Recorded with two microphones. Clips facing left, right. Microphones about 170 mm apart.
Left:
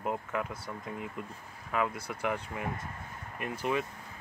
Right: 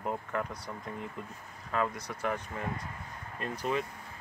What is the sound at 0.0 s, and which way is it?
Speech, 10° left (ahead or behind).